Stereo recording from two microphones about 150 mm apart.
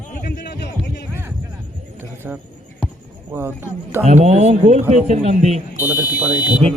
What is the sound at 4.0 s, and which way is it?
Speech, 45° right (ahead or behind).